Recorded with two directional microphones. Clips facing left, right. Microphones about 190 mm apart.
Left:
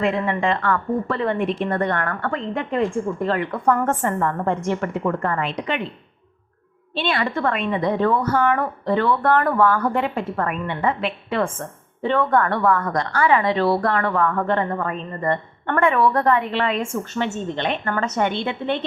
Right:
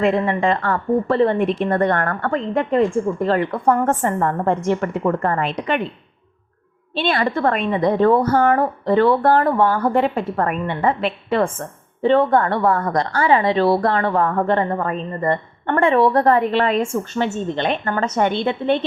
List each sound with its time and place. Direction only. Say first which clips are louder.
0.0 s a woman's voice: right 3 dB; 40° right (ahead or behind)
6.9 s a woman's voice: right 3 dB; 40° right (ahead or behind)